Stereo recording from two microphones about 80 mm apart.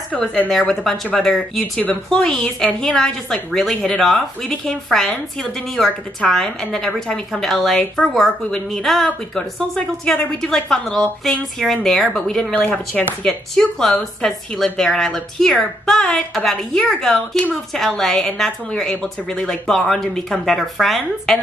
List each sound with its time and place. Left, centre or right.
0.1 s a woman's voice: centre
12.5 s speech: centre
13.2 s a woman's voice: centre